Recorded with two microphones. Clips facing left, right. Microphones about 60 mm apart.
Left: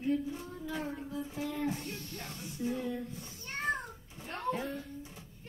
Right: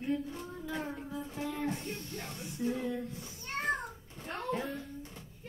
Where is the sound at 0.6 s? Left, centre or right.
Centre.